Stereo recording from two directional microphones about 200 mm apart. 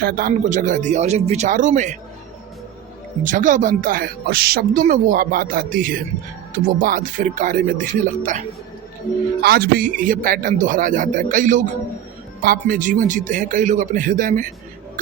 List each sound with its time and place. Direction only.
0.0 s a man's voice: 45° right (ahead or behind)
3.2 s a man's voice: 40° right (ahead or behind)
9.4 s a man's voice: 50° right (ahead or behind)